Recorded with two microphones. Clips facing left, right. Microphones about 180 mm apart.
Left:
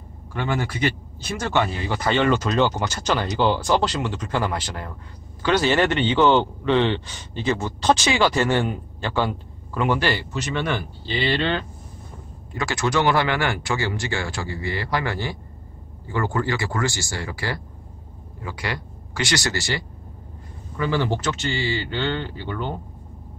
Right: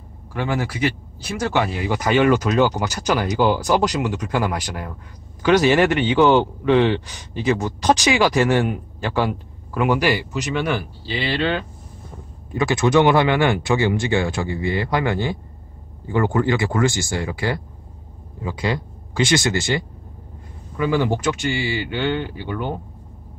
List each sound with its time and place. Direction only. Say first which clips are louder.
0.3 s a man's voice: right 2 dB; 5° right (ahead or behind)
12.4 s a man's voice: right 6 dB; 20° right (ahead or behind)